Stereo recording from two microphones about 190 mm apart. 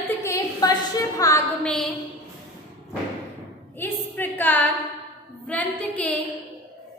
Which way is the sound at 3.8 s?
10° left (ahead or behind).